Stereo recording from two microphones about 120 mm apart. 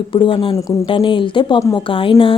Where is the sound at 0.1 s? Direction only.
45° left (ahead or behind).